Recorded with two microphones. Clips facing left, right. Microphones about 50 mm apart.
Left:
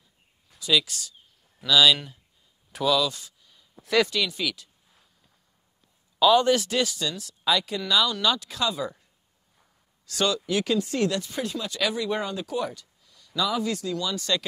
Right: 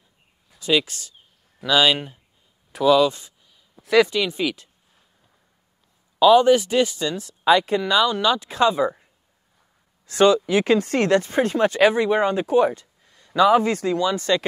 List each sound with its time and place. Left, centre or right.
0.6 s speech: right
3.4 s a sound: centre
4.1 s speech: right
6.1 s speech: centre; by 14.4 s right